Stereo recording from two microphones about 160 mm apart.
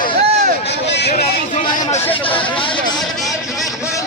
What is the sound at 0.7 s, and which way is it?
Vehicle, 90° left.